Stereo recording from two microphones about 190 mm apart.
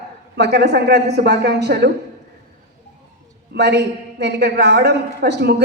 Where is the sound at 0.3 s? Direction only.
60° right (ahead or behind).